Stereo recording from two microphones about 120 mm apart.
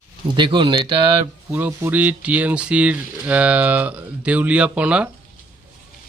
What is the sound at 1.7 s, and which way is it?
Speech, 20° right (ahead or behind).